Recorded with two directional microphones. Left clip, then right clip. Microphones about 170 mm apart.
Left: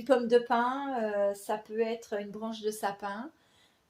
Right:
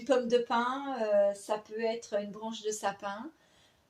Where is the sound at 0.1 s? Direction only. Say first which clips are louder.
Left 2 dB; 35° left (ahead or behind).